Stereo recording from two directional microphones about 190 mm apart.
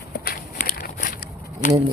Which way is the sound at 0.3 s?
50° left (ahead or behind).